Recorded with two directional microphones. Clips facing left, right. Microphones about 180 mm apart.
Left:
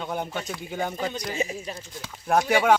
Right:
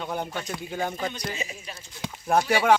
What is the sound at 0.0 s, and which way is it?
Speech, 10° left (ahead or behind).